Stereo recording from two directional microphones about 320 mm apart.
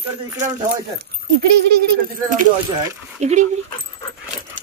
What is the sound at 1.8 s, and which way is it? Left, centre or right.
Speech, right.